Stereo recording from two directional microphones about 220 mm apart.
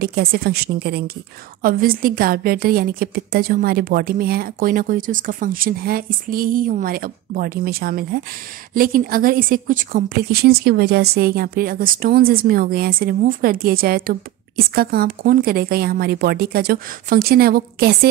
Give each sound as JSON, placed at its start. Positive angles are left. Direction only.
{"t": 0.0, "sound": "a woman's voice", "side_deg": -45}